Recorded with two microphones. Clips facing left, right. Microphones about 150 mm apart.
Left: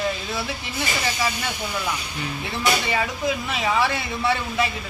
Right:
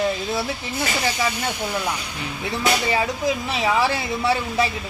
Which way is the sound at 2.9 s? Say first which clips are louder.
Right 2 dB; 30° right (ahead or behind).